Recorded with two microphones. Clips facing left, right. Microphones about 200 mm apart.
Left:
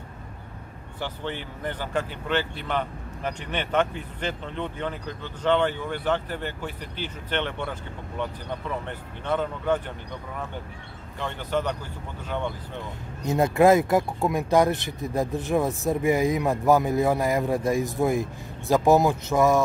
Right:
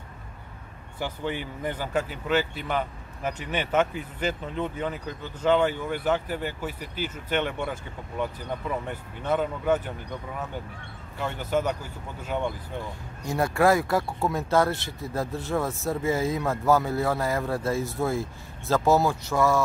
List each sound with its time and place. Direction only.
0.9 s speech: 10° right (ahead or behind)
13.2 s speech: 20° left (ahead or behind)